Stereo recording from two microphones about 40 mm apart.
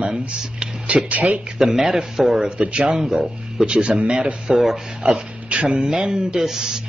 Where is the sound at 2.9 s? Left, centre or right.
Centre.